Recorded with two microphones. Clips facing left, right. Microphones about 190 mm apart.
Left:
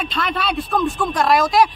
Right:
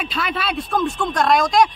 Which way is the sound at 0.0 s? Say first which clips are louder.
Left 2 dB; 5° right (ahead or behind).